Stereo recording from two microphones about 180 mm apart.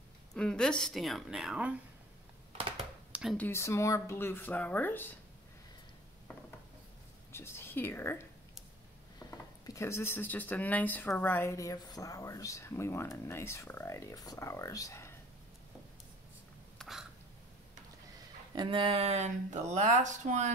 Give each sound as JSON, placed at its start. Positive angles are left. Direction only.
{"t": 0.3, "sound": "a woman's voice", "side_deg": 5}
{"t": 3.1, "sound": "a sound", "side_deg": -5}
{"t": 3.3, "sound": "speech", "side_deg": 15}
{"t": 7.3, "sound": "speech", "side_deg": 15}
{"t": 9.3, "sound": "speech", "side_deg": 15}
{"t": 16.7, "sound": "hiccup", "side_deg": 0}
{"t": 18.5, "sound": "speech", "side_deg": -25}